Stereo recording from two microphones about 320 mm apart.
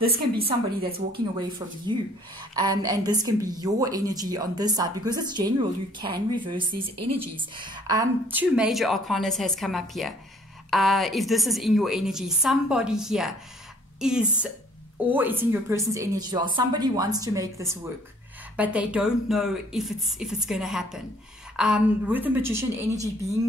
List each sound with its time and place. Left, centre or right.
0.5 s a woman's voice: right
2.5 s a woman's voice: centre